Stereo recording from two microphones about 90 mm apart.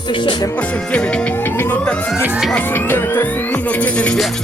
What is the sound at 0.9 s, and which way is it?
Music, 10° left (ahead or behind).